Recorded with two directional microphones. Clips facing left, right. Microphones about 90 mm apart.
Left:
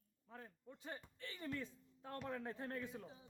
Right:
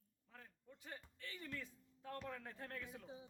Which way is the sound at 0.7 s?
30° left (ahead or behind).